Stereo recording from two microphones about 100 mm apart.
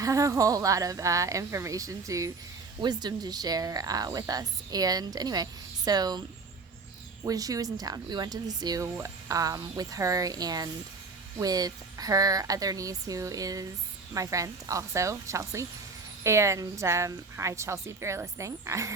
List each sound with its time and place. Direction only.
0.0 s speech: 35° right (ahead or behind)
2.8 s speech: 45° right (ahead or behind)
7.3 s a woman's voice: 35° right (ahead or behind)